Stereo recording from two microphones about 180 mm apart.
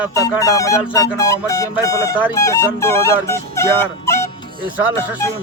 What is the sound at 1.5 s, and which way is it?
Speech, 20° left (ahead or behind).